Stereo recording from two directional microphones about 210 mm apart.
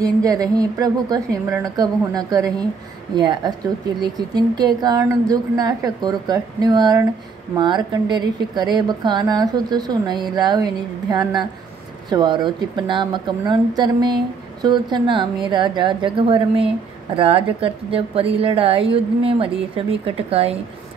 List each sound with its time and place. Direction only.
0.0 s a woman's voice: 15° right (ahead or behind)